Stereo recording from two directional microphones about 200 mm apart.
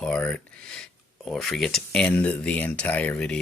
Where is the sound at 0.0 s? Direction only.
5° left (ahead or behind).